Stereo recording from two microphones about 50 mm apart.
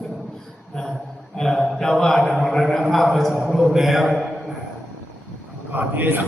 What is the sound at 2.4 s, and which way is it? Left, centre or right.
A man's voice, centre.